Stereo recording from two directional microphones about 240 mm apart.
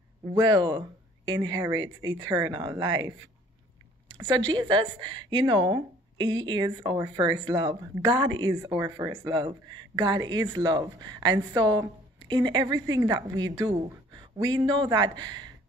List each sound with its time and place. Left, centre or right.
0.3 s speech: centre
4.5 s a woman's voice: centre